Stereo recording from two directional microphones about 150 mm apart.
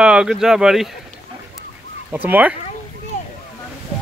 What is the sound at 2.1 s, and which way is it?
Speech, 10° right (ahead or behind).